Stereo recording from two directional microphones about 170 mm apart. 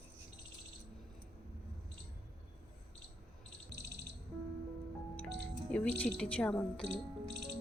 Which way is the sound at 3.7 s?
75° right (ahead or behind).